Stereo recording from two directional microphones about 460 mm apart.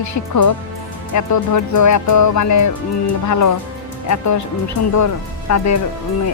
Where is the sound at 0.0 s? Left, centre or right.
Left.